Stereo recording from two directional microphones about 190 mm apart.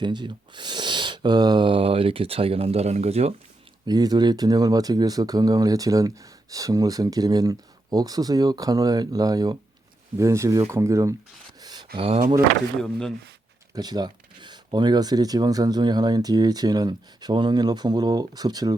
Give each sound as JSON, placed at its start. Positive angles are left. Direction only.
{"t": 0.0, "sound": "speech", "side_deg": -25}
{"t": 3.8, "sound": "speech", "side_deg": -20}
{"t": 11.6, "sound": "a sound", "side_deg": -20}
{"t": 11.9, "sound": "speech", "side_deg": -30}
{"t": 12.8, "sound": "speech", "side_deg": 5}
{"t": 13.7, "sound": "speech", "side_deg": -20}